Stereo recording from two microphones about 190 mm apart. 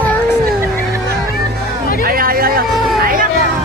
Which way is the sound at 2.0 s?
50° right (ahead or behind).